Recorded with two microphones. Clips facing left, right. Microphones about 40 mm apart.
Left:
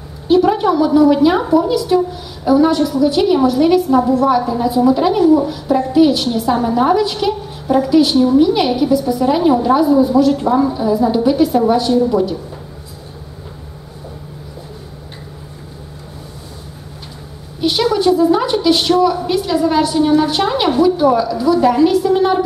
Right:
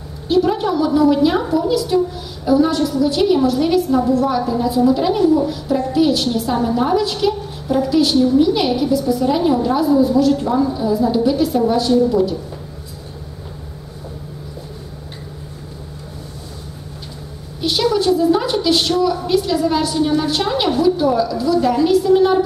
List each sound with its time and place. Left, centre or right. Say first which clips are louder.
0.3 s a woman's voice: left 4 dB; centre
17.6 s a woman's voice: left 2 dB; centre